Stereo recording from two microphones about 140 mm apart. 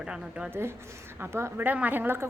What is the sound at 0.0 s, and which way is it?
A woman's voice, 5° right (ahead or behind).